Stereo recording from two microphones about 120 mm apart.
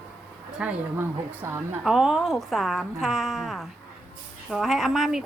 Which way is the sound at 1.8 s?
5° right (ahead or behind).